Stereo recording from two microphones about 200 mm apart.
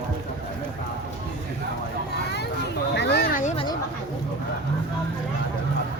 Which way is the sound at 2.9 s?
55° left (ahead or behind).